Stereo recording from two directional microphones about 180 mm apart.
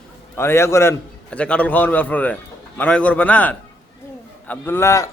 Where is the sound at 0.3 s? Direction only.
15° left (ahead or behind).